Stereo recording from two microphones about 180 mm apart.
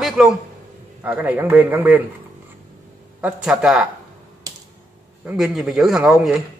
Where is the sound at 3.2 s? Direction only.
5° right (ahead or behind).